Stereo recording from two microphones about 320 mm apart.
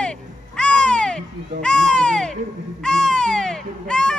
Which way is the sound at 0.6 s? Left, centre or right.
Centre.